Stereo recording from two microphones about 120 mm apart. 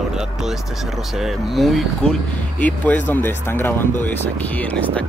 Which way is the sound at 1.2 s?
Centre (ahead or behind).